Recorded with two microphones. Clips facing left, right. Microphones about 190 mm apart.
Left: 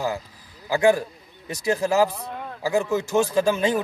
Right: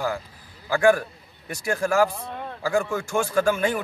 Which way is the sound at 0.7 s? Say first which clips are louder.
Even; 20° left (ahead or behind).